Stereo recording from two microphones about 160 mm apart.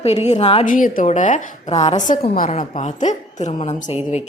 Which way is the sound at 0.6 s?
55° left (ahead or behind).